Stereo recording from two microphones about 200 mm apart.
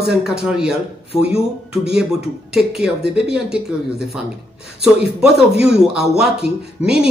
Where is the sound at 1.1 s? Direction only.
30° left (ahead or behind).